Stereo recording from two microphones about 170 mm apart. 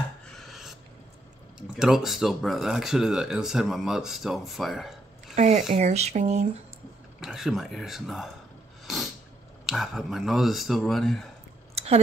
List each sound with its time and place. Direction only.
0.3 s a sound: centre (ahead or behind)
1.8 s speech: centre (ahead or behind)
5.3 s speech: 40° right (ahead or behind)
7.2 s speech: 5° right (ahead or behind)
8.8 s snort: centre (ahead or behind)
9.7 s speech: centre (ahead or behind)
11.7 s chewing: 35° right (ahead or behind)